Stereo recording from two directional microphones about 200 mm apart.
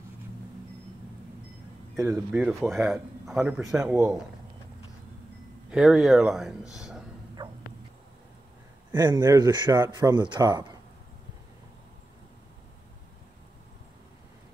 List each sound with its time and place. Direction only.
2.0 s speech: 10° right (ahead or behind)
5.7 s speech: centre (ahead or behind)
6.7 s a sound: centre (ahead or behind)
8.9 s speech: 20° right (ahead or behind)